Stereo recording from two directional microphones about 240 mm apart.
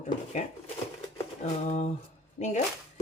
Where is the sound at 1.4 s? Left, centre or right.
Left.